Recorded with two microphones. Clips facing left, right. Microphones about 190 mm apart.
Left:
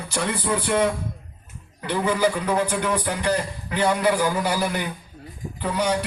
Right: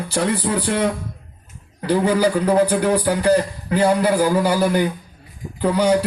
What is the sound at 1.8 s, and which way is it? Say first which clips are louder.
A man's voice: right 5 dB; 35° right (ahead or behind).